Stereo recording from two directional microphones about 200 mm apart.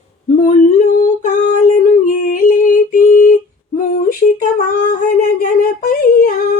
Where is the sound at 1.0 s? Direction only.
45° left (ahead or behind).